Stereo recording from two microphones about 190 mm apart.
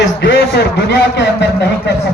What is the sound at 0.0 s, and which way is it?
A man's voice, 60° left (ahead or behind).